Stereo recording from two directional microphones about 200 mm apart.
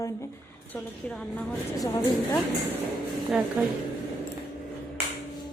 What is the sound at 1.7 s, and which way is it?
Speech, 20° left (ahead or behind).